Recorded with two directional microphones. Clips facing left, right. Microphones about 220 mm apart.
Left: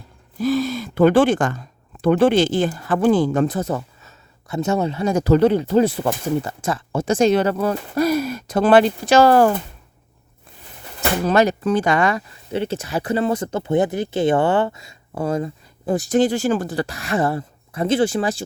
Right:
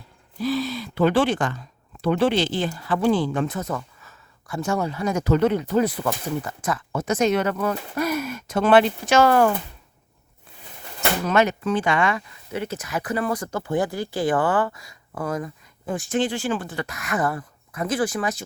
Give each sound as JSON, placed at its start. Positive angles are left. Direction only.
{"t": 0.3, "sound": "speech", "side_deg": 45}
{"t": 11.3, "sound": "speech", "side_deg": 35}